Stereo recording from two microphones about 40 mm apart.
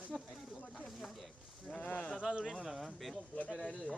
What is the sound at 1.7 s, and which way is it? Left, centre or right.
Speech, left.